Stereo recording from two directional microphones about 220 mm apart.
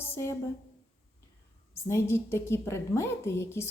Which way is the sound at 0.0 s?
10° left (ahead or behind).